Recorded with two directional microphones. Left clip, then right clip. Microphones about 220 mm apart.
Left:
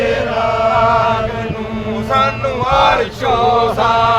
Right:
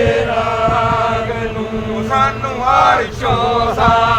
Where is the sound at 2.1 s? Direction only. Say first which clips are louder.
Left 1 dB; 45° left (ahead or behind).